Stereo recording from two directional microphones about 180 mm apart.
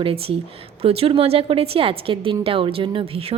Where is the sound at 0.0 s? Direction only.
30° right (ahead or behind).